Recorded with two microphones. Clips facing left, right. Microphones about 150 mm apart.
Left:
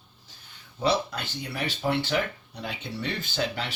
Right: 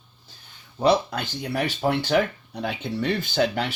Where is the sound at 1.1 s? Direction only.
50° right (ahead or behind).